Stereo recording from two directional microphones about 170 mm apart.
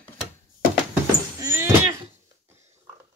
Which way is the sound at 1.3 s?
15° right (ahead or behind).